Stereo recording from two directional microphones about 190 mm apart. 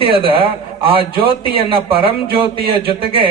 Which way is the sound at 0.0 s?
30° right (ahead or behind).